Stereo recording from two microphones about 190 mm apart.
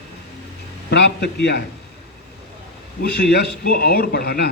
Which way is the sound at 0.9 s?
65° left (ahead or behind).